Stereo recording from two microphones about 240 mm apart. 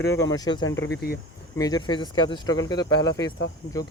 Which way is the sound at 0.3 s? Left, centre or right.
Centre.